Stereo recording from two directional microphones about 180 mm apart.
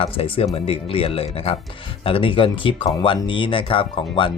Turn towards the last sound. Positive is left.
turn(degrees=30)  # may be behind; listen again after turning